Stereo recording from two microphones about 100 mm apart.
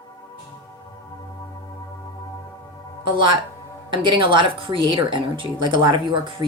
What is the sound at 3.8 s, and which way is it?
A woman's voice, 55° right (ahead or behind).